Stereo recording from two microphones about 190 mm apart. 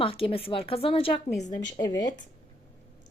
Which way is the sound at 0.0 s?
30° left (ahead or behind).